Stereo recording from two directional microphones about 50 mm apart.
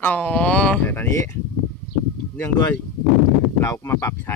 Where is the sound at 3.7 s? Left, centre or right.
Left.